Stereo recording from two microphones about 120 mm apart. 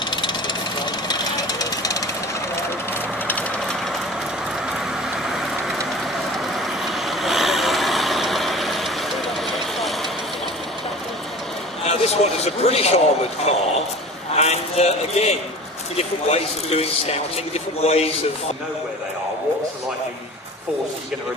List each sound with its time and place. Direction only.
0.1 s vehicle: 40° left (ahead or behind)
3.3 s vehicle: 10° left (ahead or behind)
4.7 s vehicle: 5° right (ahead or behind)
11.9 s a sound: 60° left (ahead or behind)
13.5 s a man's voice: 60° left (ahead or behind)
14.3 s a sound: 65° left (ahead or behind)
16.0 s speech: 60° left (ahead or behind)